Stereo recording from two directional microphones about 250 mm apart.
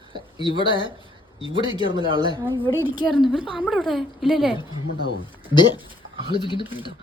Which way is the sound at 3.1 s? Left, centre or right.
Centre.